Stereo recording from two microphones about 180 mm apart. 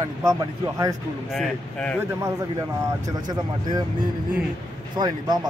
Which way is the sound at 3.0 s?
20° right (ahead or behind).